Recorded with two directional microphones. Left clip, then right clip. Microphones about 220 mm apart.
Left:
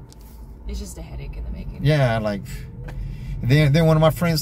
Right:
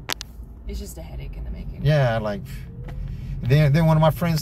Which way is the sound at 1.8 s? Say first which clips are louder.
Left 1 dB; 25° left (ahead or behind).